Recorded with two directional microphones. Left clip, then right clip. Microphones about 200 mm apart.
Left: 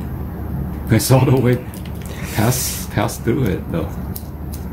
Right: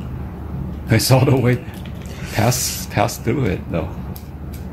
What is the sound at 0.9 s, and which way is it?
Speech, 30° right (ahead or behind).